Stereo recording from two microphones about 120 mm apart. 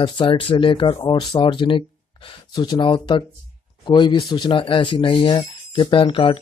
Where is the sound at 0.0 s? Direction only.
45° left (ahead or behind).